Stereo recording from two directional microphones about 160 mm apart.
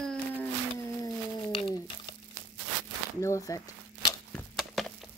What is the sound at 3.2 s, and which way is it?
Speech, 20° left (ahead or behind).